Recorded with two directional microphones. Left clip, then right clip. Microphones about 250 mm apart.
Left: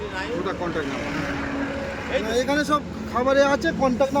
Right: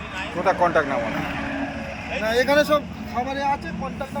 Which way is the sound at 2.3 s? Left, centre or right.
Centre.